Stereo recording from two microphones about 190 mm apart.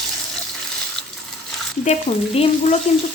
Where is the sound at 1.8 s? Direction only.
35° left (ahead or behind).